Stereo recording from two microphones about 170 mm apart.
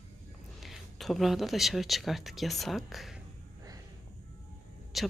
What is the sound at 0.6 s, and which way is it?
Speech, centre (ahead or behind).